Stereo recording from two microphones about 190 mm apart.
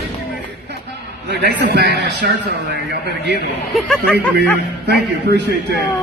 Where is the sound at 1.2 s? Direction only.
60° right (ahead or behind).